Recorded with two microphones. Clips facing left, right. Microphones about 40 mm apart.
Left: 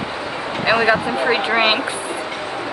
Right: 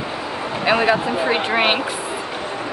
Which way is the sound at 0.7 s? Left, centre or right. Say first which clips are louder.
Left 1 dB; centre.